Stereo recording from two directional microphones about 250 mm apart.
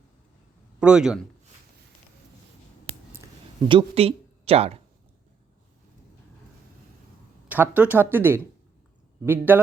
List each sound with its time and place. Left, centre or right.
0.8 s a man's voice: centre
3.7 s speech: right
7.4 s speech: centre